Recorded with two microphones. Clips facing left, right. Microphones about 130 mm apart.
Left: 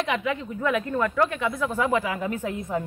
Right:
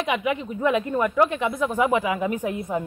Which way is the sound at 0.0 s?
15° right (ahead or behind).